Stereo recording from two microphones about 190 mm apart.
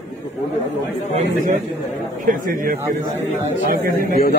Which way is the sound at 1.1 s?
45° right (ahead or behind).